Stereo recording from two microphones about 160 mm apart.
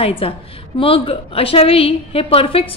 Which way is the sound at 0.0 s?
35° left (ahead or behind).